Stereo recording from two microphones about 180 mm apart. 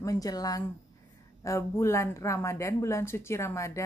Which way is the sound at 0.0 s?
20° left (ahead or behind).